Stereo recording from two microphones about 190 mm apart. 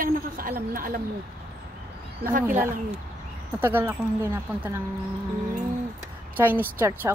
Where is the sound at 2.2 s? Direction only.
45° right (ahead or behind).